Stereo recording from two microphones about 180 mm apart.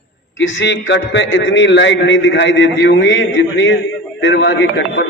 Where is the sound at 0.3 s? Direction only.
90° left.